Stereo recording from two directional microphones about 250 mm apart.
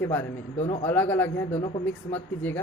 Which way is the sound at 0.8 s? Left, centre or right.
Centre.